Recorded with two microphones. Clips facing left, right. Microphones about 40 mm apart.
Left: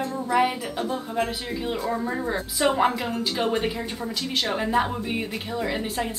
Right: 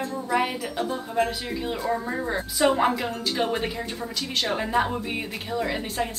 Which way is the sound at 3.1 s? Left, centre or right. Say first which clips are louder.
Left 1 dB; centre.